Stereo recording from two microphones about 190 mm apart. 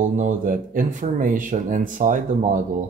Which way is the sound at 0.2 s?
45° right (ahead or behind).